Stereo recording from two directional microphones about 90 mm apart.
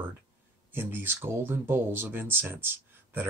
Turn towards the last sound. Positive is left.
turn(degrees=-25)  # may be behind; listen again after turning